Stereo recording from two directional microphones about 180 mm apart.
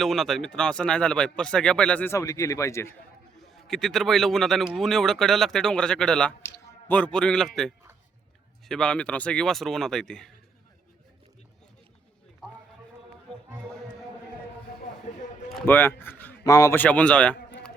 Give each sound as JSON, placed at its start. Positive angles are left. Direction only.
{"t": 0.0, "sound": "speech", "side_deg": 0}
{"t": 3.3, "sound": "speech", "side_deg": 0}
{"t": 15.6, "sound": "speech", "side_deg": 10}